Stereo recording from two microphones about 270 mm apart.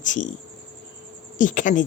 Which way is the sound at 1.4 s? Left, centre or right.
Left.